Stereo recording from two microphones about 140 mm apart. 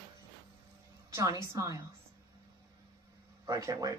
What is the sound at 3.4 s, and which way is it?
Speech, 25° right (ahead or behind).